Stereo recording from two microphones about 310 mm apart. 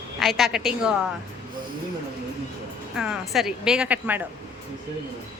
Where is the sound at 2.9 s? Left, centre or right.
Centre.